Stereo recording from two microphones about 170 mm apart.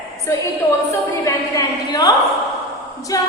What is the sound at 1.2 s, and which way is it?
A woman's voice, 20° left (ahead or behind).